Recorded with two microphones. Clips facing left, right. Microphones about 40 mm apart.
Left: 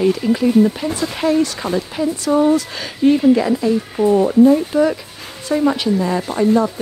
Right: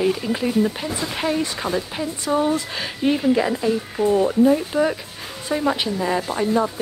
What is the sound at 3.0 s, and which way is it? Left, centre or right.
A woman's voice, centre.